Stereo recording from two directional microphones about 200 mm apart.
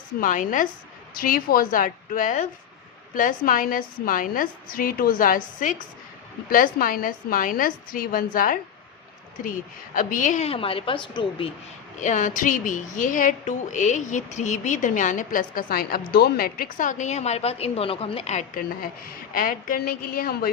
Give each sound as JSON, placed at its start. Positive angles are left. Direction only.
{"t": 0.2, "sound": "a woman's voice", "side_deg": 40}
{"t": 11.9, "sound": "a woman's voice", "side_deg": 40}